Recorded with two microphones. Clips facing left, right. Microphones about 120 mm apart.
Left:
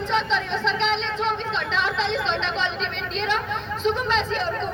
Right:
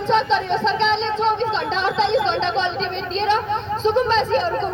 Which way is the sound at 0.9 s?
25° right (ahead or behind).